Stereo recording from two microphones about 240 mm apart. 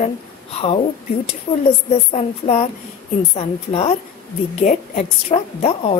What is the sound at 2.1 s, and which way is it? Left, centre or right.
A woman's voice, left.